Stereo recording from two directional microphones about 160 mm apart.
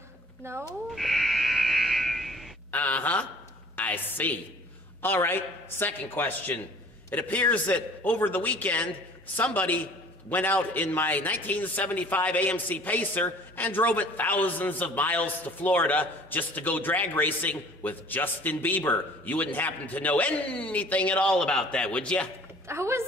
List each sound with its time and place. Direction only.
0.4 s speech: 15° right (ahead or behind)
0.9 s buzzer: centre (ahead or behind)
3.7 s a woman's voice: 10° left (ahead or behind)
22.7 s a woman's voice: 15° right (ahead or behind)